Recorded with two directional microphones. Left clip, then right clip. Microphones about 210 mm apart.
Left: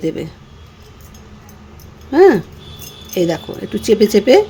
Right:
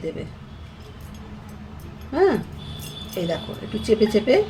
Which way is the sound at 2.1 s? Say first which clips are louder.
Left 10 dB; 50° left (ahead or behind).